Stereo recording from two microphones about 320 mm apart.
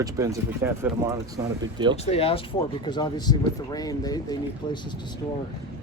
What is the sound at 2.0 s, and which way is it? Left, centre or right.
Speech, centre.